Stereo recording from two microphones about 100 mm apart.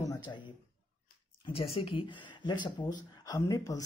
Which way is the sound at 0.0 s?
45° left (ahead or behind).